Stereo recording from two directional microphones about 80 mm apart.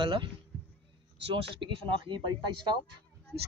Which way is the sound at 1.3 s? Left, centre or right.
Right.